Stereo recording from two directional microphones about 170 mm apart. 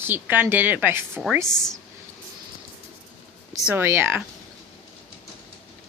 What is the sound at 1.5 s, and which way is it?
Speech, 5° left (ahead or behind).